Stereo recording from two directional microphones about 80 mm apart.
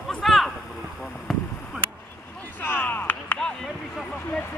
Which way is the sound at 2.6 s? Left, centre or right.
Left.